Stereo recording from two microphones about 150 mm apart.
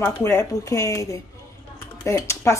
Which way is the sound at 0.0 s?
15° left (ahead or behind).